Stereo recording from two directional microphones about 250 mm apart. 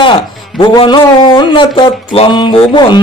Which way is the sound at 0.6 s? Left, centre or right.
Centre.